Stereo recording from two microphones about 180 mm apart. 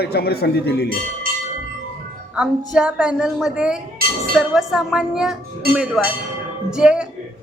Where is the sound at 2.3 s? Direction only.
5° right (ahead or behind).